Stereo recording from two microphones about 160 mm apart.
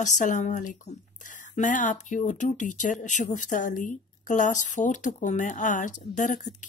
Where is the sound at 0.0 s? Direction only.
50° left (ahead or behind).